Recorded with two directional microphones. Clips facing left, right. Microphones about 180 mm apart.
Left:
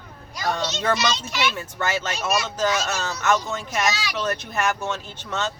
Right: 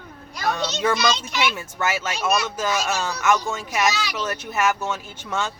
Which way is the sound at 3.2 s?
10° right (ahead or behind).